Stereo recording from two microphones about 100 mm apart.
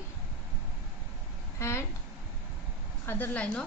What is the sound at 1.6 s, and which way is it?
Speech, 30° left (ahead or behind).